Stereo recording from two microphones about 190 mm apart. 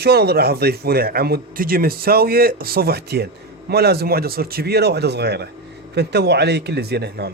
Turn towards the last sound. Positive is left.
turn(degrees=-60)  # may be behind; listen again after turning